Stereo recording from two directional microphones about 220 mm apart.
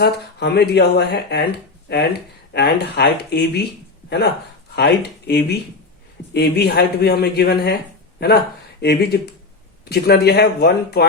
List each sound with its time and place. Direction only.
0.0 s speech: 50° left (ahead or behind)
4.7 s speech: 50° left (ahead or behind)
8.8 s speech: 50° left (ahead or behind)